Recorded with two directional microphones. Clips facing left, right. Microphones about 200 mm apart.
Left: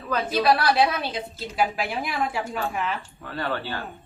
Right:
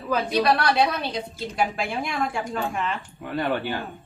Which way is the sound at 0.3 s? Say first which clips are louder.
Left 2 dB; 5° left (ahead or behind).